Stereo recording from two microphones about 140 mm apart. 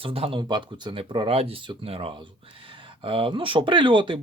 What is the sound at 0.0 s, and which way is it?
Speech, 40° right (ahead or behind).